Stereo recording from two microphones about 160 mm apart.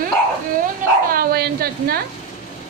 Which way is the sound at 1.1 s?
75° right (ahead or behind).